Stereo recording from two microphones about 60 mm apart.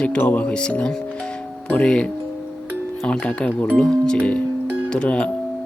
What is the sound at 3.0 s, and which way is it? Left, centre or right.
Speech, centre.